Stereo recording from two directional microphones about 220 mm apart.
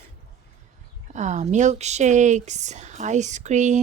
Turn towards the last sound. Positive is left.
turn(degrees=-35)  # may be behind; listen again after turning